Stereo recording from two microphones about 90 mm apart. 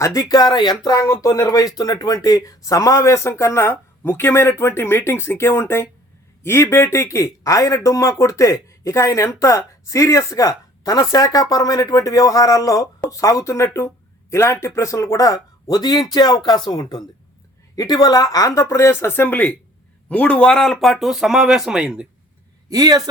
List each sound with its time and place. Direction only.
0.0 s speech: 40° left (ahead or behind); by 22.0 s 10° right (ahead or behind)
22.7 s a man's voice: 45° right (ahead or behind)